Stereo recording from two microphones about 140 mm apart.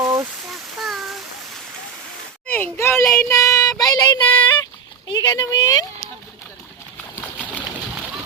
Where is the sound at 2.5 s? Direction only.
15° left (ahead or behind).